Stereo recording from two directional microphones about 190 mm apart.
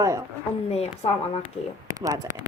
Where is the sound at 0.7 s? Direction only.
35° left (ahead or behind).